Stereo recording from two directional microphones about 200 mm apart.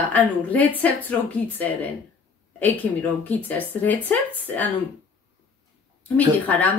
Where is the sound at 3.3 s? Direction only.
10° left (ahead or behind).